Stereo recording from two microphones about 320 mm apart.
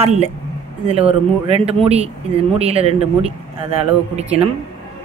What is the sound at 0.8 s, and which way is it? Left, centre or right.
Speech, centre.